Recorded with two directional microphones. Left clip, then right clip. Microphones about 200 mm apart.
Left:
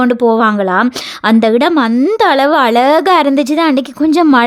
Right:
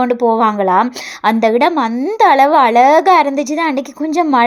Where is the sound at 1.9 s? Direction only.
35° left (ahead or behind).